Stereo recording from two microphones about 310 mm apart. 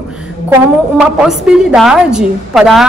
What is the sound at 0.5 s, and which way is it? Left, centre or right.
A woman's voice, centre.